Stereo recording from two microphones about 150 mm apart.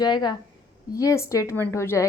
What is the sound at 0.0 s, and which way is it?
A woman's voice, 30° left (ahead or behind).